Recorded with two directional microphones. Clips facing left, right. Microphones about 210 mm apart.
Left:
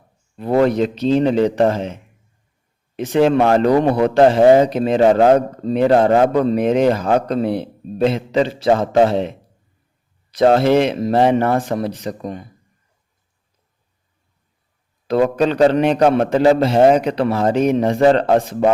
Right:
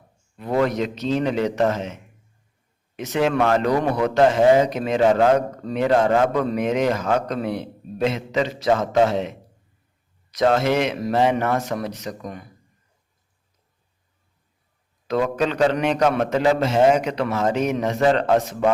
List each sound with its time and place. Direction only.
0.3 s a man's voice: 30° left (ahead or behind)
10.3 s a man's voice: 30° left (ahead or behind)
15.0 s a man's voice: 35° left (ahead or behind)